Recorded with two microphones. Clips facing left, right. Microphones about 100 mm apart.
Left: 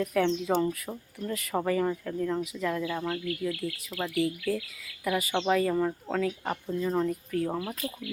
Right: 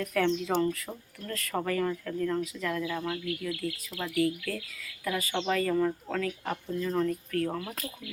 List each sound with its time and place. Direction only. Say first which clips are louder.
0.0 s speech: left 1 dB; 10° left (ahead or behind)